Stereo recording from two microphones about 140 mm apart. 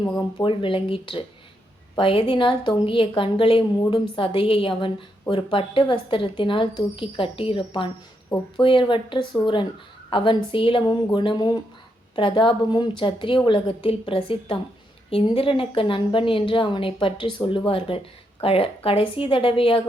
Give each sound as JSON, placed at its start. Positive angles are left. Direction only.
{"t": 0.0, "sound": "a woman's voice", "side_deg": 35}